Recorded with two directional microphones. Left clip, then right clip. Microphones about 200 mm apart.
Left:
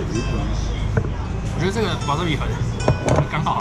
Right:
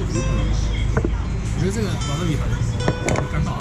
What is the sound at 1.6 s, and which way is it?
Music, centre (ahead or behind).